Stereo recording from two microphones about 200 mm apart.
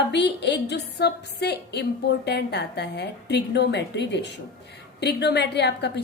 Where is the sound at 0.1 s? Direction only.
55° left (ahead or behind).